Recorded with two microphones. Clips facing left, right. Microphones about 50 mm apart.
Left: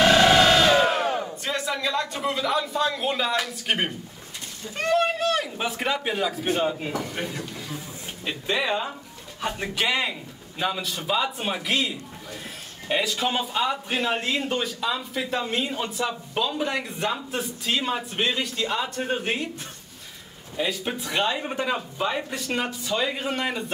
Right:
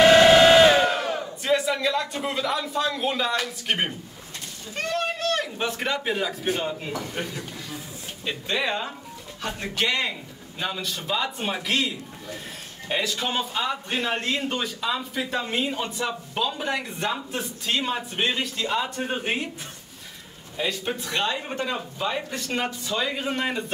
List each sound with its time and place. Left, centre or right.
0.0 s crowd: centre
0.8 s crowd: centre
1.4 s a sound: centre
2.2 s a man's voice: centre
20.5 s a man's voice: centre